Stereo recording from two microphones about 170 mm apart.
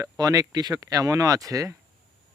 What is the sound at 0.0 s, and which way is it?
Speech, 20° right (ahead or behind).